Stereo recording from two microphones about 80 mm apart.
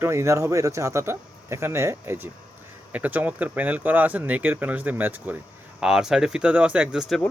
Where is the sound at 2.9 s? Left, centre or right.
Right.